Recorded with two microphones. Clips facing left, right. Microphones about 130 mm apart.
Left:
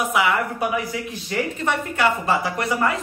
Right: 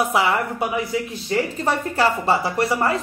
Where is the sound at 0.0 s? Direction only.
35° right (ahead or behind).